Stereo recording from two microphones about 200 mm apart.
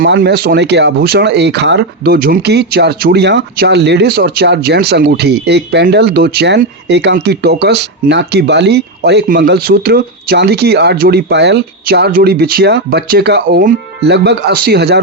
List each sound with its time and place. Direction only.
0.0 s speech: 60° right (ahead or behind)